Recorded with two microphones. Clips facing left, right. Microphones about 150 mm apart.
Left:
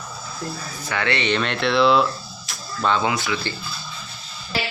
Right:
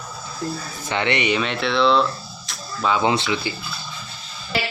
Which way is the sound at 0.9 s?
20° right (ahead or behind).